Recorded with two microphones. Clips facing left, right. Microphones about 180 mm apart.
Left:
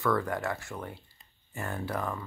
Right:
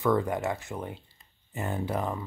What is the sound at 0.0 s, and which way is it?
Speech, 20° right (ahead or behind).